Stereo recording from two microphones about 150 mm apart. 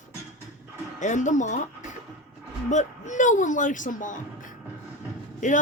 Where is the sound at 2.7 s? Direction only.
55° left (ahead or behind).